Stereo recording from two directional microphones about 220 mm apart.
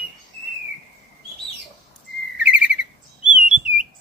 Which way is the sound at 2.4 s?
5° right (ahead or behind).